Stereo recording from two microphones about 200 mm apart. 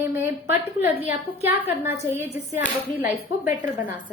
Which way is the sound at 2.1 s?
10° right (ahead or behind).